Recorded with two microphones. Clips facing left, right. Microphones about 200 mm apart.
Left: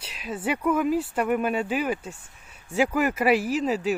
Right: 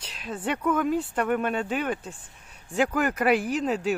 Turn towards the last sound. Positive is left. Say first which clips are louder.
# left 1 dB
turn(degrees=5)  # may be behind; listen again after turning